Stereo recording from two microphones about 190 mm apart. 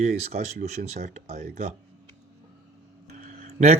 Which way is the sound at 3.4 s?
35° right (ahead or behind).